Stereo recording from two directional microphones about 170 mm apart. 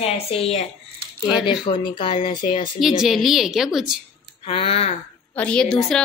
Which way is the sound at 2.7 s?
Centre (ahead or behind).